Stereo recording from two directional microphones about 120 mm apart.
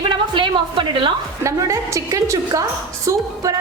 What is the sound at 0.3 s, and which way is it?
Speech, 40° right (ahead or behind).